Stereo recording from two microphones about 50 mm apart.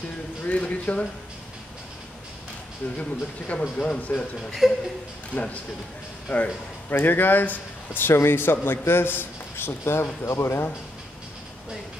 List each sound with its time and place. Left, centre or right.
0.4 s a man's voice: left
3.0 s a man's voice: left
5.3 s a man's voice: left
6.9 s speech: left
8.1 s a man's voice: left